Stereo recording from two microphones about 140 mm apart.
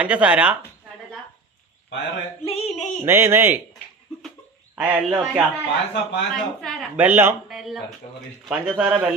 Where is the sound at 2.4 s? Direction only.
50° left (ahead or behind).